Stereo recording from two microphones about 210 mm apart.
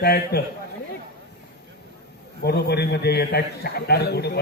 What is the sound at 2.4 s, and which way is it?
A man's voice, 50° left (ahead or behind).